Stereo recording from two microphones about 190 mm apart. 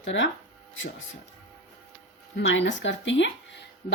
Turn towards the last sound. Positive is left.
turn(degrees=75)  # may be behind; listen again after turning